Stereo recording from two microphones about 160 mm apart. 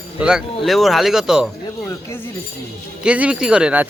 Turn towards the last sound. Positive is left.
turn(degrees=-10)  # may be behind; listen again after turning